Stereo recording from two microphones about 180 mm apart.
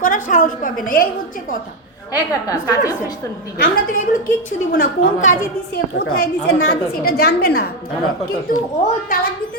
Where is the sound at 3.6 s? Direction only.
50° left (ahead or behind).